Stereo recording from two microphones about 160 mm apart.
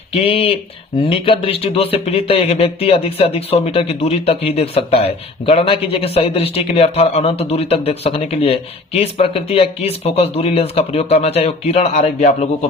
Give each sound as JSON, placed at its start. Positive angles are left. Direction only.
{"t": 0.1, "sound": "speech", "side_deg": 35}